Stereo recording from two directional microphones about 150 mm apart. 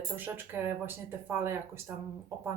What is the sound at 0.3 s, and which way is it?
Speech, 15° right (ahead or behind).